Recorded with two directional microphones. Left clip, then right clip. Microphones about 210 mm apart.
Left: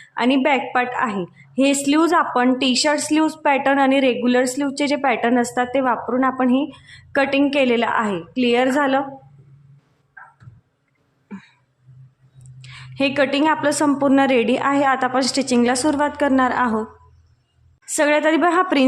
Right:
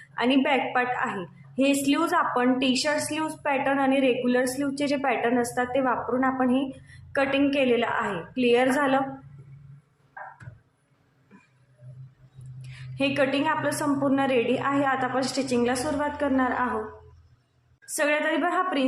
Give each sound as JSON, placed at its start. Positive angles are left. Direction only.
{"t": 0.1, "sound": "a woman's voice", "side_deg": 30}
{"t": 11.3, "sound": "a sound", "side_deg": 30}
{"t": 12.6, "sound": "a woman's voice", "side_deg": 30}
{"t": 17.9, "sound": "a woman's voice", "side_deg": 35}